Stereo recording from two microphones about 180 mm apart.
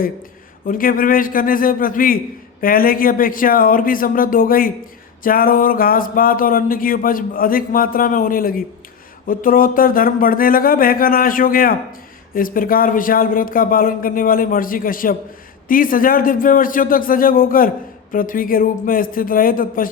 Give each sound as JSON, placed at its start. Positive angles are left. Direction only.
{"t": 0.7, "sound": "speech", "side_deg": 50}